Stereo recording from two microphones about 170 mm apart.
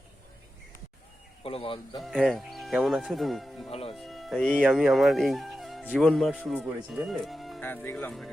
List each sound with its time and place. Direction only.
1.5 s speech: 30° left (ahead or behind)
2.0 s speech: centre (ahead or behind)
3.7 s speech: 35° left (ahead or behind)
3.9 s speech: centre (ahead or behind)
7.6 s speech: 10° left (ahead or behind)